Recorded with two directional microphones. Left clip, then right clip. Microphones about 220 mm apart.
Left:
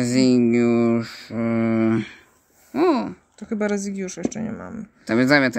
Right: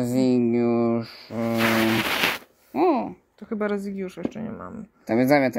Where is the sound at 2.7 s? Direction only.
15° left (ahead or behind).